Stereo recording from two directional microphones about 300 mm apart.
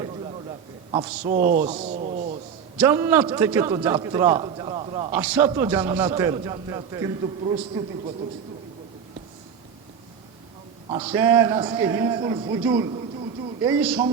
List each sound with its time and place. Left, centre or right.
0.9 s a man's voice: right
2.7 s a man's voice: centre
5.1 s a man's voice: centre
10.8 s a man's voice: centre